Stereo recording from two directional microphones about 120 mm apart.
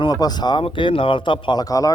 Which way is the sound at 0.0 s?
35° left (ahead or behind).